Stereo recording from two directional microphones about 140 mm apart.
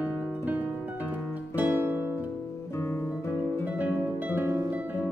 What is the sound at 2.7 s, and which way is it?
Guitar, 20° left (ahead or behind).